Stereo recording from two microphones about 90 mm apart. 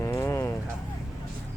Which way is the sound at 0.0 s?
30° left (ahead or behind).